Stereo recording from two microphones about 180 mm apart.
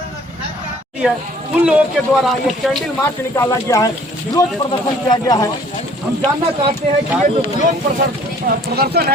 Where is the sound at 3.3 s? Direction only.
15° left (ahead or behind).